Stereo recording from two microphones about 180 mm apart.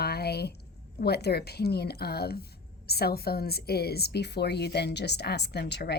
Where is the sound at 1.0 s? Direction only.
65° left (ahead or behind).